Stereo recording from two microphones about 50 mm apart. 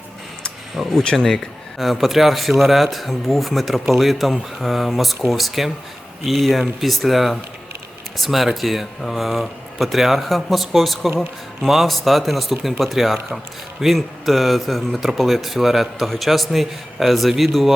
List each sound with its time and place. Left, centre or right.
0.8 s speech: centre
1.8 s speech: centre